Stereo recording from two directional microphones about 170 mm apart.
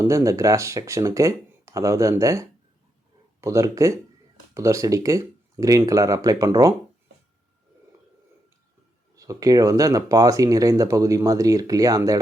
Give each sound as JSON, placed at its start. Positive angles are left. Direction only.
{"t": 0.0, "sound": "speech", "side_deg": -20}
{"t": 9.1, "sound": "speech", "side_deg": -20}